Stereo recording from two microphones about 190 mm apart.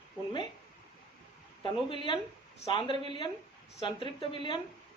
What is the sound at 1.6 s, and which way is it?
A man's voice, 25° left (ahead or behind).